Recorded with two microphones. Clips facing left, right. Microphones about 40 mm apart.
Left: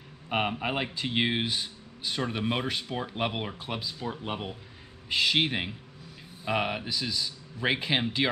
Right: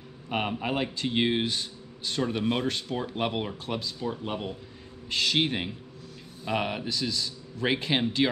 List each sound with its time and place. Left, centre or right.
0.3 s speech: centre